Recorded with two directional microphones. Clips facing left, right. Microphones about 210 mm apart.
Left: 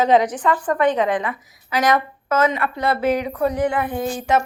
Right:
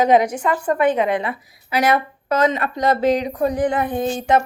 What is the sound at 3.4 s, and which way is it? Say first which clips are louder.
A woman's voice: even; 15° right (ahead or behind).